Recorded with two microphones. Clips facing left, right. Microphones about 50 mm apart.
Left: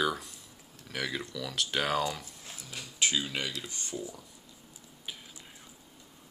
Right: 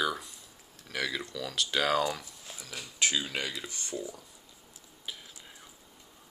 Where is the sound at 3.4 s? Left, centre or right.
Centre.